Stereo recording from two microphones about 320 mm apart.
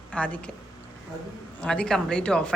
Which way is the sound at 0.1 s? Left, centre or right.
Centre.